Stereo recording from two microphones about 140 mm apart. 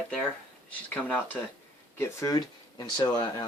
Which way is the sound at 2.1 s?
25° left (ahead or behind).